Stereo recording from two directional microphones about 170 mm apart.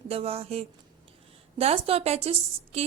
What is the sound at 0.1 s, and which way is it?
A woman's voice, 35° right (ahead or behind).